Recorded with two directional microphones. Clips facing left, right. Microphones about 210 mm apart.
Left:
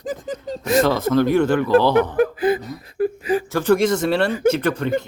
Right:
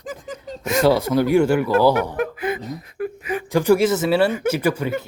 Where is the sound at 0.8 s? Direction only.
10° right (ahead or behind).